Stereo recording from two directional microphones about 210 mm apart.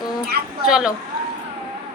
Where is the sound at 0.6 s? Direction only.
Centre (ahead or behind).